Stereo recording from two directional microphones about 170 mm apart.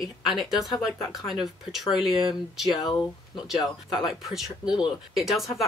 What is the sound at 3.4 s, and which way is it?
Speech, centre (ahead or behind).